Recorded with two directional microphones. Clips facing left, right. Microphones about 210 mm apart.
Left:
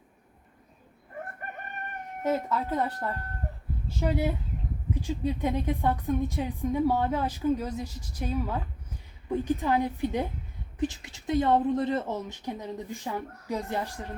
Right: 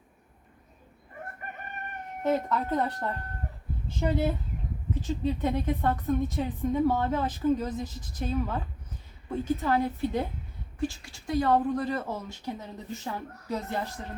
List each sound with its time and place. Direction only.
2.2 s a woman's voice: 5° left (ahead or behind)